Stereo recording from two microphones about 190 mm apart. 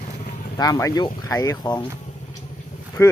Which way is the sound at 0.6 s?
20° left (ahead or behind).